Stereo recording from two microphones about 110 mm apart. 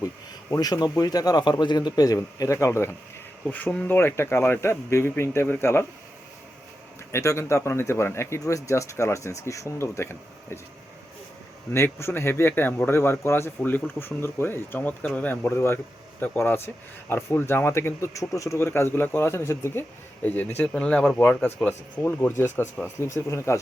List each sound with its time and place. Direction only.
0.5 s a man's voice: 35° left (ahead or behind)
3.4 s speech: 15° left (ahead or behind)
7.1 s speech: 25° left (ahead or behind)
11.7 s speech: 25° left (ahead or behind)